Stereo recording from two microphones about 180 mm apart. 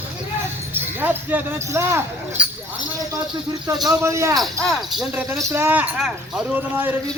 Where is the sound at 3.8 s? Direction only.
15° right (ahead or behind).